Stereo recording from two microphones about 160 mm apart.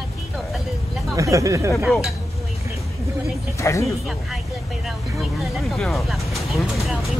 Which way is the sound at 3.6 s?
20° left (ahead or behind).